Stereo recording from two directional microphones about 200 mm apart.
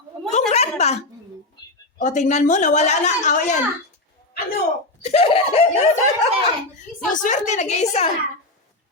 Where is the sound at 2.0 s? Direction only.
35° left (ahead or behind).